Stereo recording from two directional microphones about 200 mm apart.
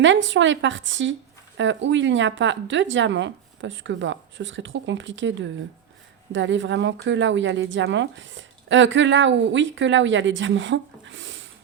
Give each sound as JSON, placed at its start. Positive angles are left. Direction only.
{"t": 0.0, "sound": "speech", "side_deg": -70}